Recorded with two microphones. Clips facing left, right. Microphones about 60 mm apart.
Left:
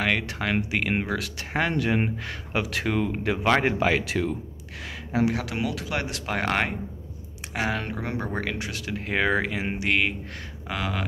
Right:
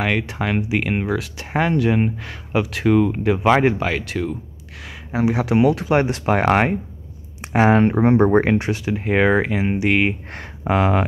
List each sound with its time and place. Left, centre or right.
0.0 s speech: centre
3.8 s speech: centre
5.1 s speech: centre
5.4 s speech: right
8.8 s speech: centre